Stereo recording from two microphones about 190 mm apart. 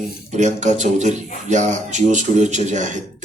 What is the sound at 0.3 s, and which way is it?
Speech, 40° right (ahead or behind).